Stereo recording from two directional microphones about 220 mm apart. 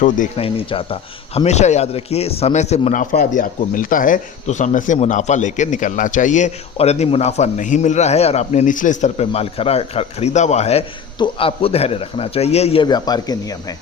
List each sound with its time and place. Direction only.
0.0 s a man's voice: 30° left (ahead or behind)